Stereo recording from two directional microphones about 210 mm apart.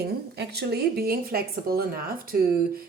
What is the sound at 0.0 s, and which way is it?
Speech, 50° right (ahead or behind).